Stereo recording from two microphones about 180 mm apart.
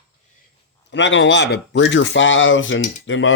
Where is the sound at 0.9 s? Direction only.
90° left.